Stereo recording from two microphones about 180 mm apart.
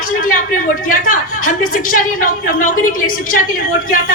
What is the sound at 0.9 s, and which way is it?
A woman's voice, 50° left (ahead or behind).